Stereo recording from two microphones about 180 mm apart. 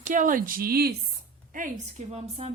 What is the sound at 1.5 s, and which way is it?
A woman's voice, 45° right (ahead or behind).